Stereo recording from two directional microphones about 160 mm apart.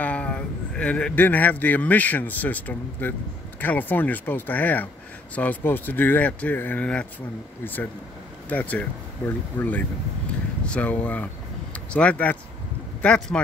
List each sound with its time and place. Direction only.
0.0 s a man's voice: 10° left (ahead or behind)